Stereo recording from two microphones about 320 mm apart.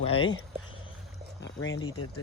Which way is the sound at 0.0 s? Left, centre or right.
Centre.